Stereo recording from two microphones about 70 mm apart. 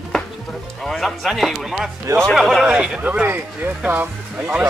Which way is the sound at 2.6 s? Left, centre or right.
Centre.